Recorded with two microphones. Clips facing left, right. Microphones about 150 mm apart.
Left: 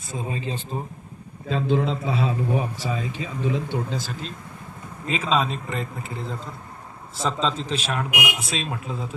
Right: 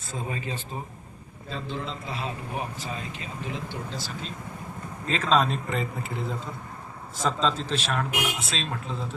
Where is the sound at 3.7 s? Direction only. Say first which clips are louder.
Left 7 dB; 50° left (ahead or behind).